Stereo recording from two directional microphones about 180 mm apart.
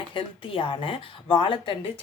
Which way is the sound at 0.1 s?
30° left (ahead or behind).